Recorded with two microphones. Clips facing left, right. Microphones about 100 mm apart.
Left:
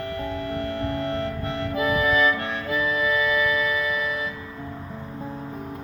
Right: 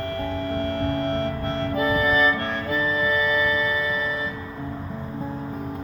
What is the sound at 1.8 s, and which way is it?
Music, 35° right (ahead or behind).